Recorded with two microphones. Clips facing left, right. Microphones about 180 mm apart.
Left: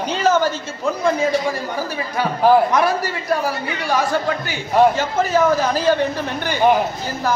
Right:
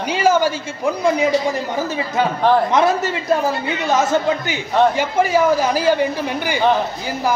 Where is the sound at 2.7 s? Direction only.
20° right (ahead or behind).